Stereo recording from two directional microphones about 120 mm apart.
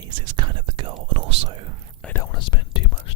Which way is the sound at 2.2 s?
40° left (ahead or behind).